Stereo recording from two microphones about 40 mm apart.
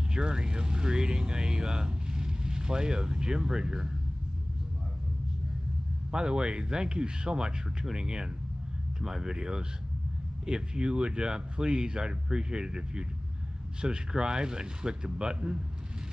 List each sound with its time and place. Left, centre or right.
0.1 s speech: right
6.1 s speech: right